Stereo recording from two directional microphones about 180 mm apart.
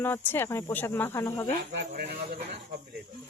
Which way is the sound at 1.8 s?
60° right (ahead or behind).